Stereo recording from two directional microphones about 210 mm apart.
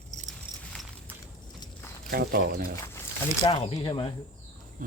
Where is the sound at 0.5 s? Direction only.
20° right (ahead or behind).